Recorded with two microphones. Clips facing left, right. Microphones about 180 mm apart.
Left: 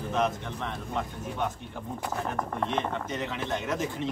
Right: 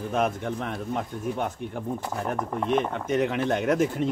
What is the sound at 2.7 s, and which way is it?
Speech, 10° right (ahead or behind).